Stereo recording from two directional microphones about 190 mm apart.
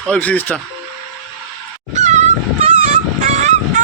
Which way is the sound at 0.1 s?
10° left (ahead or behind).